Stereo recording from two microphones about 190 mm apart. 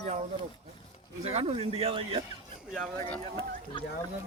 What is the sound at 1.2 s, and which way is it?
Speech, 35° right (ahead or behind).